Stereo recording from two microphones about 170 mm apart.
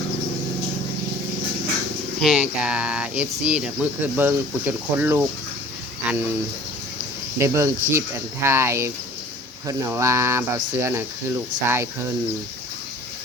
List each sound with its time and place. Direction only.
2.2 s speech: 5° right (ahead or behind)
6.0 s a sound: 10° right (ahead or behind)
7.3 s speech: 15° right (ahead or behind)